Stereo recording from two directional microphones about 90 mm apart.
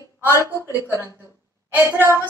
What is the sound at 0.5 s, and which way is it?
Music, 30° right (ahead or behind).